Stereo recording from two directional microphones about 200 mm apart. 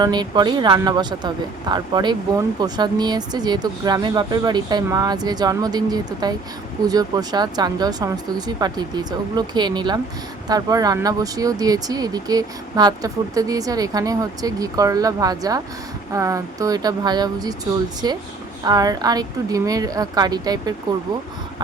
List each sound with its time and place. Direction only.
0.0 s speech: 20° right (ahead or behind)